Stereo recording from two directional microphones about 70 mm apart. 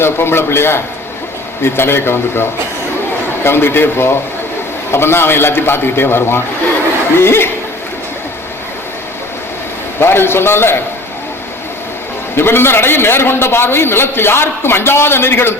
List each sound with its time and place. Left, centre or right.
0.0 s a man's voice: left
10.0 s a man's voice: left
12.4 s a man's voice: left